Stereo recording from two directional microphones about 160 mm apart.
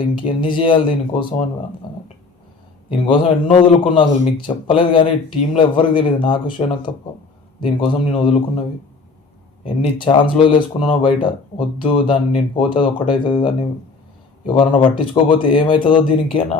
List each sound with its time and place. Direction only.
0.0 s speech: 30° left (ahead or behind)
1.8 s a sound: 30° left (ahead or behind)
2.9 s speech: 35° left (ahead or behind)
9.6 s speech: 35° left (ahead or behind)